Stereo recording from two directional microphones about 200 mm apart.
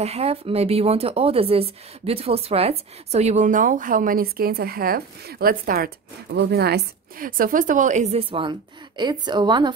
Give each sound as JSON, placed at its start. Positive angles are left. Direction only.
{"t": 0.0, "sound": "speech", "side_deg": -30}